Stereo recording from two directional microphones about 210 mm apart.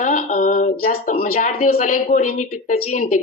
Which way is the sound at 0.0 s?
40° left (ahead or behind).